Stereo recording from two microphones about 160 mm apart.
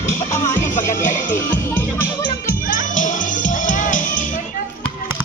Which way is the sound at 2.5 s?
60° left (ahead or behind).